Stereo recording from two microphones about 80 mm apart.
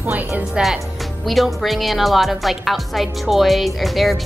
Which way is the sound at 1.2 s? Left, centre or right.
Centre.